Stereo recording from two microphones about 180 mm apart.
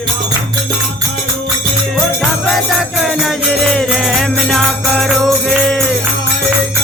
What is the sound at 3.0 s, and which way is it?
Music, centre (ahead or behind).